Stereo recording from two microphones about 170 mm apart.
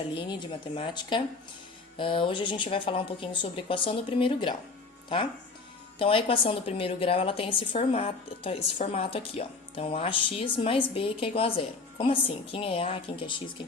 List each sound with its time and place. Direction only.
0.1 s a woman's voice: 30° left (ahead or behind)
6.0 s a woman's voice: 30° left (ahead or behind)